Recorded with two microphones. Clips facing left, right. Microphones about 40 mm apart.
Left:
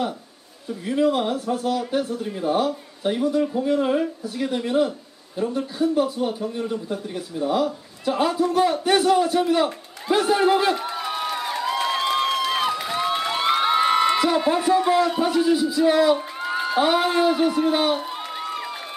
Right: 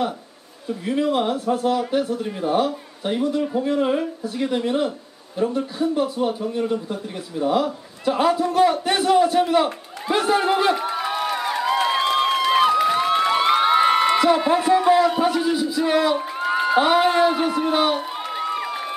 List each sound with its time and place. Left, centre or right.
0.8 s a man's voice: centre
3.7 s a man's voice: centre
10.0 s a sound: centre